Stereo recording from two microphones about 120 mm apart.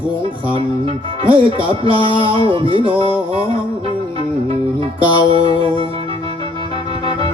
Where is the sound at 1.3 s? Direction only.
50° right (ahead or behind).